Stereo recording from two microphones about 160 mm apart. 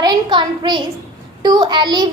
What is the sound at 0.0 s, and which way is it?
A child's voice, 25° right (ahead or behind).